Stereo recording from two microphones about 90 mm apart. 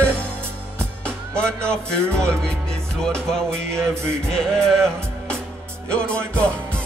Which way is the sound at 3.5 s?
30° right (ahead or behind).